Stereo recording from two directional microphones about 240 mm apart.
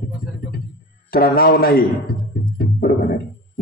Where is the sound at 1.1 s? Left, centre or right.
Left.